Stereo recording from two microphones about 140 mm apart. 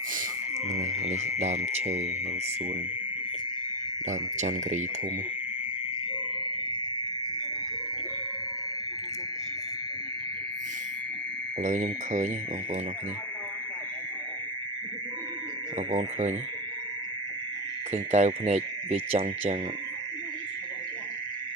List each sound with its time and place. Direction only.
1.7 s speech: 50° right (ahead or behind)
4.4 s insect: 55° right (ahead or behind)
11.6 s insect: 60° right (ahead or behind)
15.9 s insect: 60° right (ahead or behind)
17.9 s speech: 55° right (ahead or behind)